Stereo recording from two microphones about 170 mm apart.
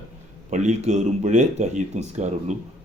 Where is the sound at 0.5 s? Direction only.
45° right (ahead or behind).